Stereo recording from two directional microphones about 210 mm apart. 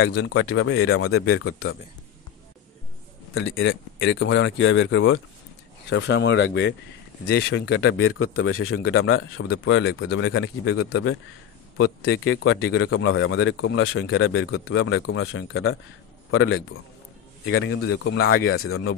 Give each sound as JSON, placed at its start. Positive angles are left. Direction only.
{"t": 0.0, "sound": "speech", "side_deg": 55}
{"t": 0.4, "sound": "speech", "side_deg": 90}
{"t": 3.3, "sound": "a man's voice", "side_deg": 65}
{"t": 11.7, "sound": "a man's voice", "side_deg": 70}
{"t": 14.8, "sound": "a man's voice", "side_deg": 80}
{"t": 18.2, "sound": "speech", "side_deg": 85}